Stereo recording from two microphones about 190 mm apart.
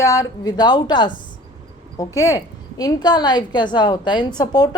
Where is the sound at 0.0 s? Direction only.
15° left (ahead or behind).